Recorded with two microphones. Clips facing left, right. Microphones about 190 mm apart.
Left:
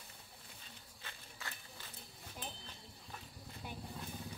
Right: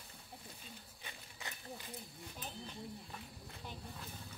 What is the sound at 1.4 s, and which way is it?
Run, 20° right (ahead or behind).